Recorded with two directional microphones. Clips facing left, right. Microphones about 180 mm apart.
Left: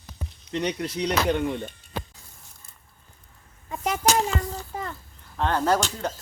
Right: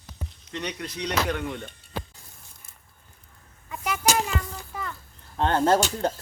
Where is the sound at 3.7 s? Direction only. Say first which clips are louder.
Left 2 dB; 35° left (ahead or behind).